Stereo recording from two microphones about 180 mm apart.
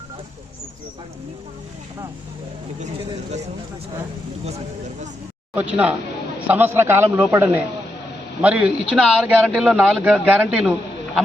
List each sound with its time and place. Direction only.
4.4 s speech: 35° right (ahead or behind)
5.5 s a man's voice: 10° right (ahead or behind)